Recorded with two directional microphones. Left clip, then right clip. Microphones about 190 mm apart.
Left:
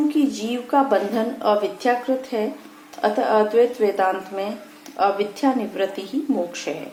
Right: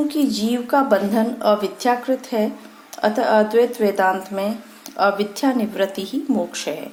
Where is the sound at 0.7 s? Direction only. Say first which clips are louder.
Right 1 dB; 40° right (ahead or behind).